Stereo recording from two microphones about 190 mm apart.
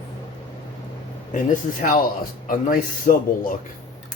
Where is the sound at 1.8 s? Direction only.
45° left (ahead or behind).